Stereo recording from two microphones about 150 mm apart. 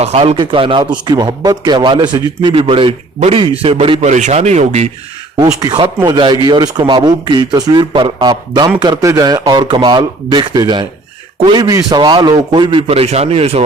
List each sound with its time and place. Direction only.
0.0 s a man's voice: 45° right (ahead or behind)
4.0 s speech: 50° right (ahead or behind)
5.4 s a man's voice: 25° right (ahead or behind); by 13.6 s 45° right (ahead or behind)